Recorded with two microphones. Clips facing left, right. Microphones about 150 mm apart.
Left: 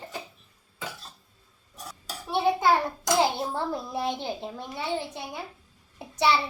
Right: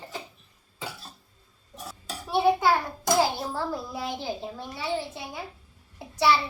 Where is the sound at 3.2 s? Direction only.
20° left (ahead or behind).